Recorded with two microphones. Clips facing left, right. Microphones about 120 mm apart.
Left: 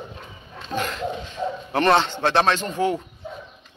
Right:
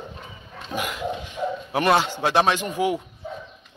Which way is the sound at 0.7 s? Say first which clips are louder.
Left 1 dB; 10° right (ahead or behind).